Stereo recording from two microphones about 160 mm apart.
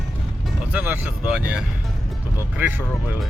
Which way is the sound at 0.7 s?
10° right (ahead or behind).